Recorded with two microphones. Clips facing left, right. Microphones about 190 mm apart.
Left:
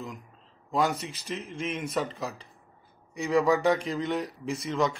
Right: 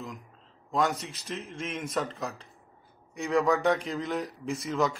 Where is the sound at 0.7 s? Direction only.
Centre (ahead or behind).